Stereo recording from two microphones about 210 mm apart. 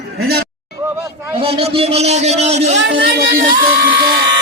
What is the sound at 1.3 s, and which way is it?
A man's voice, 30° right (ahead or behind).